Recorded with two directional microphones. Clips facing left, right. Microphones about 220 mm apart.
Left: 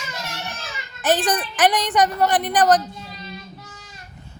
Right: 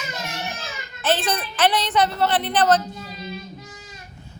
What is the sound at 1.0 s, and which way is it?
A woman's voice, 15° left (ahead or behind).